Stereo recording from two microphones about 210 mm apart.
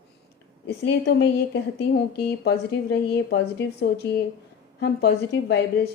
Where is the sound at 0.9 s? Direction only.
55° left (ahead or behind).